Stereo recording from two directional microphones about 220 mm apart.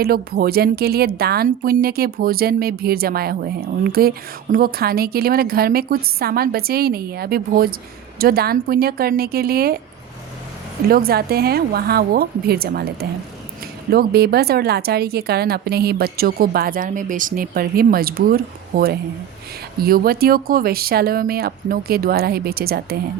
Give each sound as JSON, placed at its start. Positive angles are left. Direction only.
{"t": 0.0, "sound": "speech", "side_deg": -45}
{"t": 10.8, "sound": "speech", "side_deg": -45}